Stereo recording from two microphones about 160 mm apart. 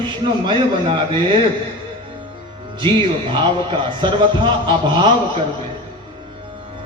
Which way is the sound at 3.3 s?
30° right (ahead or behind).